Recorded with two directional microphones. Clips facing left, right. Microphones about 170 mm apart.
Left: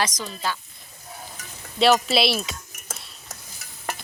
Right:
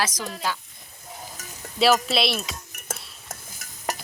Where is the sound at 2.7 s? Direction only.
60° right (ahead or behind).